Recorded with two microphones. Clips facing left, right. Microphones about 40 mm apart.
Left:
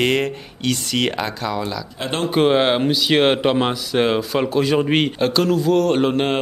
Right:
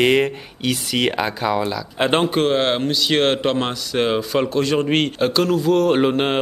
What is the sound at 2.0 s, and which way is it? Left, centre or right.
Speech, right.